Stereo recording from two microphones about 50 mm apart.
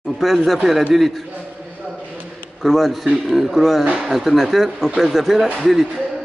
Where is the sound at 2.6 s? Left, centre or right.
Centre.